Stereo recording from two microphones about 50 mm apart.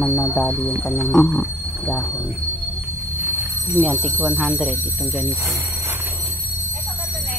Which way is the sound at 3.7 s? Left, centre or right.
Left.